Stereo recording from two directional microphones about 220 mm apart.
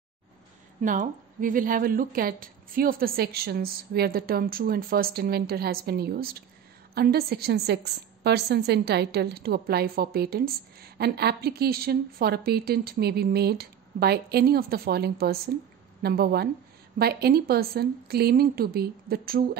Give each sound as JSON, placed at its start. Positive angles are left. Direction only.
{"t": 0.7, "sound": "a woman's voice", "side_deg": -35}